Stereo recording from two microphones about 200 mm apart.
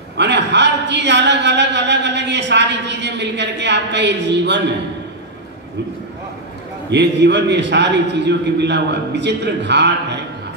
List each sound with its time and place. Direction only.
0.2 s a man's voice: 60° right (ahead or behind)
6.9 s a man's voice: 60° right (ahead or behind)